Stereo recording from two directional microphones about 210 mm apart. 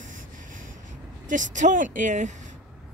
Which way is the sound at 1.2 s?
35° right (ahead or behind).